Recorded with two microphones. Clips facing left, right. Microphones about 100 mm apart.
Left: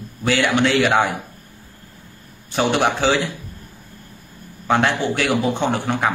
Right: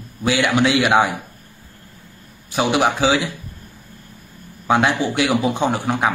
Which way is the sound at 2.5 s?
10° right (ahead or behind).